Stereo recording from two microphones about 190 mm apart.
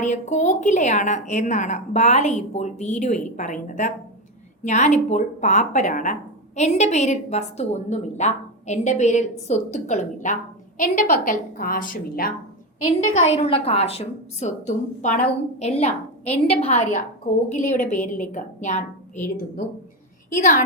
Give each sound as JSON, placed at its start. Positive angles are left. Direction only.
{"t": 0.0, "sound": "a woman's voice", "side_deg": 40}
{"t": 12.8, "sound": "a woman's voice", "side_deg": 35}